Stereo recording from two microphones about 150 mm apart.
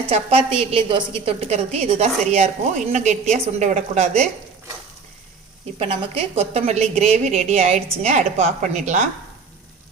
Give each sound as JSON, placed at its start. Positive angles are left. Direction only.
{"t": 0.1, "sound": "a woman's voice", "side_deg": -40}
{"t": 5.8, "sound": "a woman's voice", "side_deg": -40}